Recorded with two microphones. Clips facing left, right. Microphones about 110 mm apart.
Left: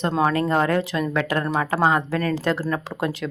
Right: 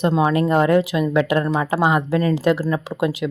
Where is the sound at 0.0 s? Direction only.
10° right (ahead or behind).